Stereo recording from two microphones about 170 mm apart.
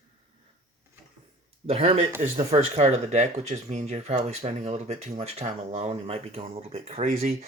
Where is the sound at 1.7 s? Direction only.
35° right (ahead or behind).